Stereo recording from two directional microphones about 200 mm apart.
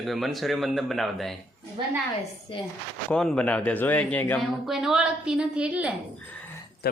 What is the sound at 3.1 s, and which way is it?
Speech, 5° left (ahead or behind).